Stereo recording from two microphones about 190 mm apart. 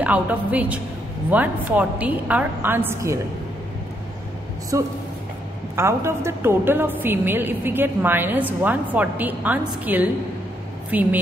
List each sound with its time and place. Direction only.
0.0 s a woman's voice: 5° right (ahead or behind)
4.7 s a woman's voice: 15° right (ahead or behind)